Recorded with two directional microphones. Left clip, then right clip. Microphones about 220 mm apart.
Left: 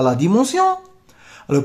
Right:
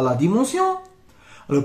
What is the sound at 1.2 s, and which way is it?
Music, 50° left (ahead or behind).